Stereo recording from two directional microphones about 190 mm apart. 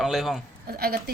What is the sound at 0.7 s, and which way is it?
Speech, 55° right (ahead or behind).